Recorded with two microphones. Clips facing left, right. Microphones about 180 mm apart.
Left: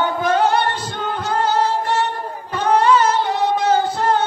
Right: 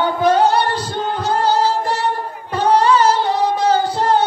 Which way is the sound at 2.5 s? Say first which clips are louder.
Right 1 dB; 35° right (ahead or behind).